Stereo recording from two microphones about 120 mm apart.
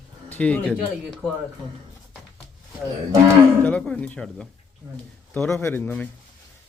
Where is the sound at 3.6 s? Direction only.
10° left (ahead or behind).